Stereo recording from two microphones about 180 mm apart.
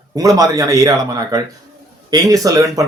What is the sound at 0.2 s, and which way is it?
Speech, 20° right (ahead or behind).